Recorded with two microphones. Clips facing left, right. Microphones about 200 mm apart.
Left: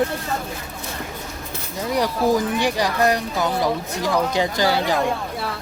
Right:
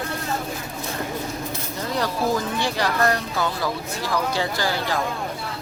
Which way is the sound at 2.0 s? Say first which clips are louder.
Left 4 dB; 15° left (ahead or behind).